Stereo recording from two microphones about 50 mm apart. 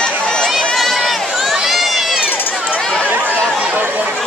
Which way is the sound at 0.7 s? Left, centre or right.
Centre.